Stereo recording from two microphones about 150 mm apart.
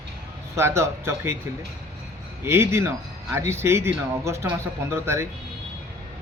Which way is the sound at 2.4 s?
15° right (ahead or behind).